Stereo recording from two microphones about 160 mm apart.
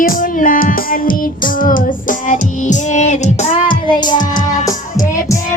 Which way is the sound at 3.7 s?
30° left (ahead or behind).